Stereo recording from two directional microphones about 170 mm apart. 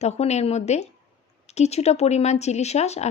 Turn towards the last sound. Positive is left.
turn(degrees=40)  # may be behind; listen again after turning